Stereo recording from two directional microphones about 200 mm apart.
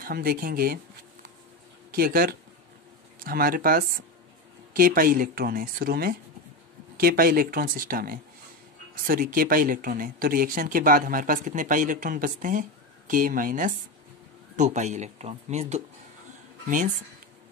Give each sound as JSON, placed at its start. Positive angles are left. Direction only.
{"t": 0.0, "sound": "speech", "side_deg": -45}
{"t": 1.9, "sound": "speech", "side_deg": -50}